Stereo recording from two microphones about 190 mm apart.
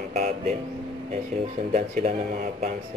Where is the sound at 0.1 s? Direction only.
35° right (ahead or behind).